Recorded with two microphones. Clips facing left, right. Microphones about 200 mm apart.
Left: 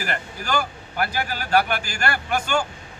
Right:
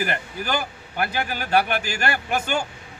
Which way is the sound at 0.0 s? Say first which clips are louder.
Right 3 dB; 20° right (ahead or behind).